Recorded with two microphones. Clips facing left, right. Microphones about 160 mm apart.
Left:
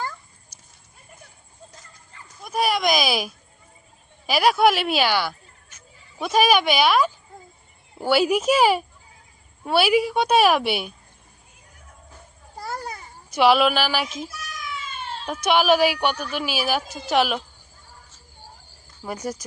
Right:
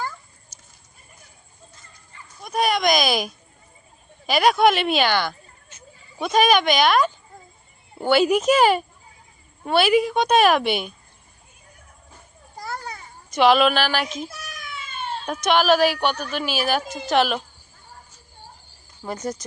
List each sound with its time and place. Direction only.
0.5 s horse: 15° left (ahead or behind)
2.4 s a woman's voice: 5° left (ahead or behind)
12.5 s babbling: 10° left (ahead or behind)
13.3 s a woman's voice: 5° left (ahead or behind)
14.3 s meow: 55° right (ahead or behind)
15.3 s a woman's voice: 10° left (ahead or behind)
19.0 s a woman's voice: 10° left (ahead or behind)